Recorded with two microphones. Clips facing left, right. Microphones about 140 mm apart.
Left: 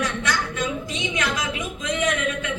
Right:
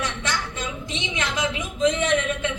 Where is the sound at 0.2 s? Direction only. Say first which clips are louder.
Left 3 dB; 30° right (ahead or behind).